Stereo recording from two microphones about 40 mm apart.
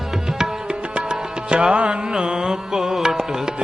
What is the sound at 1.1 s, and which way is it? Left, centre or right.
Music, right.